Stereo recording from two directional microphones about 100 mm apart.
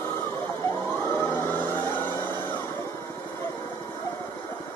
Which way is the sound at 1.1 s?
20° left (ahead or behind).